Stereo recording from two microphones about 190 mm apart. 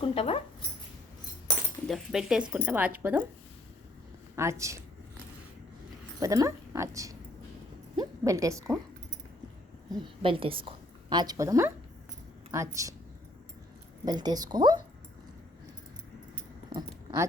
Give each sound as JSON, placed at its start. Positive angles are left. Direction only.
{"t": 0.0, "sound": "a sound", "side_deg": 30}
{"t": 1.9, "sound": "speech", "side_deg": 0}
{"t": 4.4, "sound": "speech", "side_deg": -15}
{"t": 6.1, "sound": "speech", "side_deg": -15}
{"t": 10.0, "sound": "a woman's voice", "side_deg": -30}
{"t": 14.0, "sound": "a woman's voice", "side_deg": -20}
{"t": 16.6, "sound": "keys jangling", "side_deg": -20}